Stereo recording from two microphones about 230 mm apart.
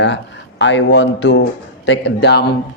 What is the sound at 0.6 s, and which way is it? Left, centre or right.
Speech, left.